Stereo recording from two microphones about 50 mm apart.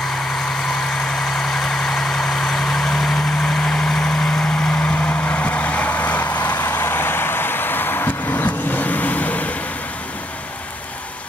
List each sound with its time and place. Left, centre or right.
1.0 s vehicle: centre
4.9 s vehicle: left
6.7 s vehicle: left